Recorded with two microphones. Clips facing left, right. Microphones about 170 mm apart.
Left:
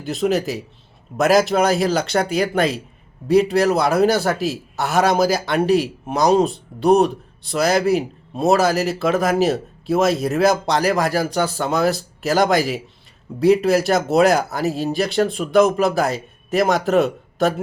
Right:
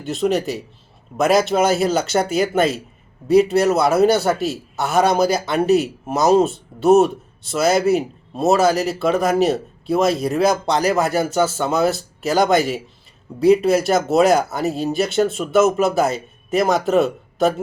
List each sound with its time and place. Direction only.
0.0 s a man's voice: centre (ahead or behind)